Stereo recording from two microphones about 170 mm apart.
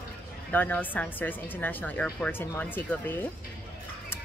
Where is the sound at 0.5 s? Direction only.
10° left (ahead or behind).